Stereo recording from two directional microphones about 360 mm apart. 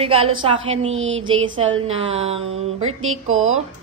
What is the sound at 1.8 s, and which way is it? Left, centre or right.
Speech, centre.